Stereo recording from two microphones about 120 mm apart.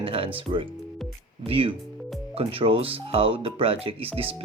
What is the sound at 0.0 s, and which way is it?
Speech, 50° right (ahead or behind).